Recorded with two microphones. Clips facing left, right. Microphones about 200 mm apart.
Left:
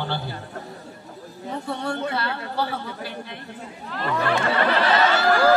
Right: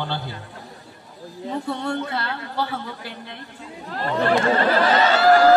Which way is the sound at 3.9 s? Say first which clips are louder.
Right 3 dB; 35° right (ahead or behind).